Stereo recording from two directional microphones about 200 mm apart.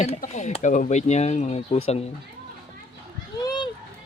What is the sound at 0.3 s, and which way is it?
Speech, 35° left (ahead or behind).